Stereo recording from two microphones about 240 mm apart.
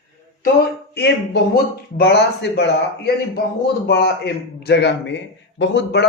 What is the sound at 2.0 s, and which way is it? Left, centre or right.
A man's voice, left.